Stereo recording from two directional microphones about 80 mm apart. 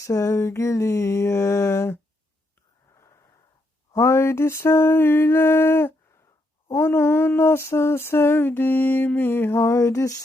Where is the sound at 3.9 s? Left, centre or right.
Left.